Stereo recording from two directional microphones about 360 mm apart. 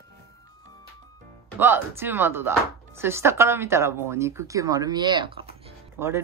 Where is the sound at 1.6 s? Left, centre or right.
Centre.